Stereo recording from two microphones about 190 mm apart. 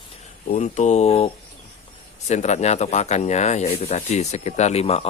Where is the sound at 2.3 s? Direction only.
35° left (ahead or behind).